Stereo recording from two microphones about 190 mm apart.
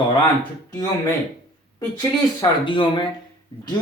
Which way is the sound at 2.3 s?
25° left (ahead or behind).